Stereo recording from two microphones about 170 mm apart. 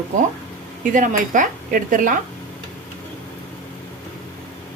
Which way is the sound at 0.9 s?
50° right (ahead or behind).